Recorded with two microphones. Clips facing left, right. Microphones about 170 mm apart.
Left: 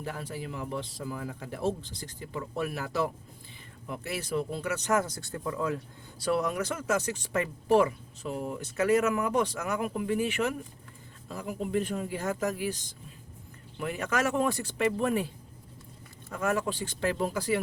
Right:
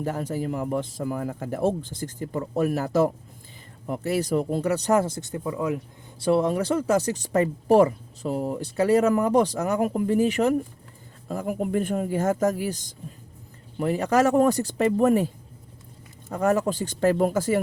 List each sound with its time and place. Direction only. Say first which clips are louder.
0.0 s speech: right 9 dB; 45° right (ahead or behind)
11.3 s speech: right 6 dB; 50° right (ahead or behind)
16.3 s speech: right 7 dB; 35° right (ahead or behind)